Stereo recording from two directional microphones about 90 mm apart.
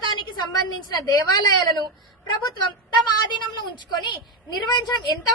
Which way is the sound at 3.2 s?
55° left (ahead or behind).